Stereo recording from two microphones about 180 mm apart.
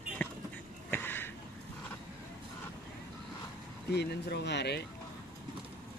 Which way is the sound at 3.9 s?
65° left (ahead or behind).